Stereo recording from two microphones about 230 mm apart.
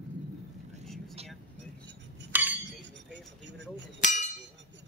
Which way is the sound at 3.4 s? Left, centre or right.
Right.